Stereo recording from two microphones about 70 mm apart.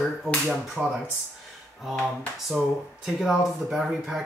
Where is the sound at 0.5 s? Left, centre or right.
Centre.